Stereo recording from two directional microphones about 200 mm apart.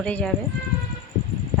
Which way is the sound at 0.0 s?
5° left (ahead or behind).